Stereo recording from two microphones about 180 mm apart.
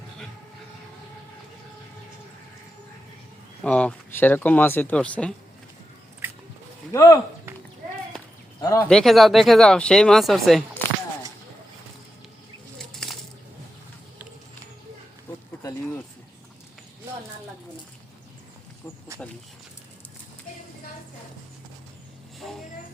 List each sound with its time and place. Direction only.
3.6 s speech: 5° left (ahead or behind)
6.2 s biting: 10° right (ahead or behind)
6.9 s speech: 20° left (ahead or behind)
8.6 s speech: 15° left (ahead or behind)
8.9 s speech: centre (ahead or behind)
12.8 s bird flight: 5° left (ahead or behind)